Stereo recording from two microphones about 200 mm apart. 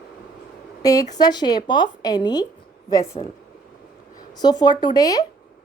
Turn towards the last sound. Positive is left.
turn(degrees=20)  # may be behind; listen again after turning